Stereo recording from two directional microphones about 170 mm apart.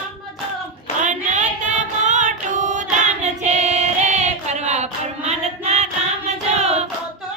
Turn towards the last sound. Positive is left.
turn(degrees=-40)  # may be behind; listen again after turning